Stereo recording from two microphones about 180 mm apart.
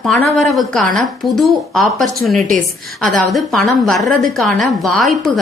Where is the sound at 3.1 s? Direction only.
Centre (ahead or behind).